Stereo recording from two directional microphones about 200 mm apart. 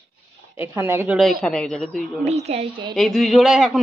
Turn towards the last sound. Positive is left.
turn(degrees=0)  # may be behind; listen again after turning